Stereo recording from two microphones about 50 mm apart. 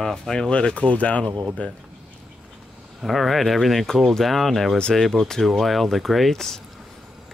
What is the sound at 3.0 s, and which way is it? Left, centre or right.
Speech, centre.